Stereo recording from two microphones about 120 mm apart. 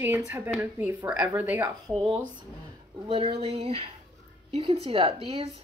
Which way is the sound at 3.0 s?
45° right (ahead or behind).